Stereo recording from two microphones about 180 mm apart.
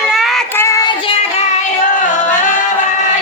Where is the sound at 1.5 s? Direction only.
45° left (ahead or behind).